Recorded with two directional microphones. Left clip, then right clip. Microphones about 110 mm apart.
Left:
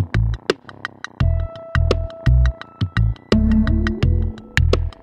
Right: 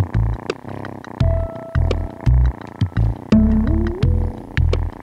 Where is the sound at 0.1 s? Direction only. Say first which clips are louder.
Left 9 dB; centre (ahead or behind).